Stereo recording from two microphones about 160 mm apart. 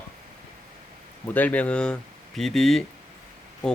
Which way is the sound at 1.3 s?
10° left (ahead or behind).